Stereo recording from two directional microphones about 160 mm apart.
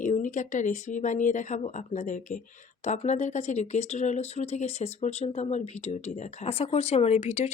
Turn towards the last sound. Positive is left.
turn(degrees=40)  # may be behind; listen again after turning